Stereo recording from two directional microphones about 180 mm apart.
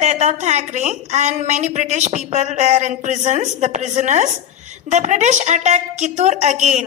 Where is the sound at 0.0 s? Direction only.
40° right (ahead or behind).